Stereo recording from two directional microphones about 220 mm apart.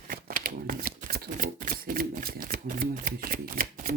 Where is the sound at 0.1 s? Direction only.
40° right (ahead or behind).